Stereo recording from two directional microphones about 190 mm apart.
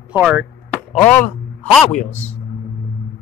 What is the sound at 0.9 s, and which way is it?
Speech, 10° left (ahead or behind).